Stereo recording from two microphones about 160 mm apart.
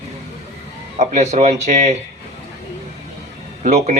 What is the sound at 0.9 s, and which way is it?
A man's voice, 45° right (ahead or behind).